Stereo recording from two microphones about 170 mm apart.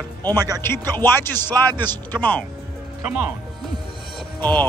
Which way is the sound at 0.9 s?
15° left (ahead or behind).